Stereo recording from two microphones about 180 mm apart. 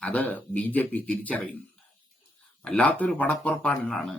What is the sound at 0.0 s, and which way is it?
Speech, 10° left (ahead or behind).